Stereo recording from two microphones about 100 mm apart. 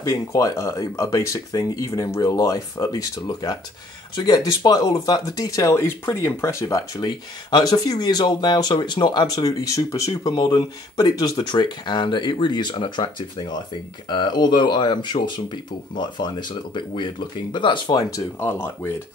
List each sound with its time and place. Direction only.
0.0 s speech: 35° left (ahead or behind)
10.3 s speech: 45° left (ahead or behind)
18.1 s speech: 25° left (ahead or behind)